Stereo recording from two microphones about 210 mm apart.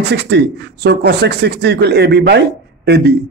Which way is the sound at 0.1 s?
55° right (ahead or behind).